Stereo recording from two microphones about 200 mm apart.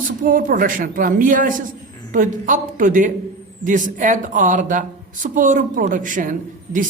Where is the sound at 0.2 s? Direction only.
45° right (ahead or behind).